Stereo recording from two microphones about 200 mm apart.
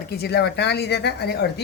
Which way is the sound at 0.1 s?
55° left (ahead or behind).